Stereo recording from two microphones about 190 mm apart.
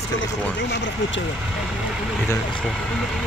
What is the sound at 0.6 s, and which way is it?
Speech, 65° left (ahead or behind).